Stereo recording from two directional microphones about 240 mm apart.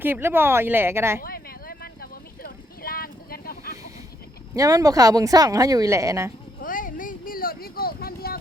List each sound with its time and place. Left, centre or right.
0.0 s speech: centre
1.2 s vehicle: left
4.5 s speech: centre
6.6 s a sound: left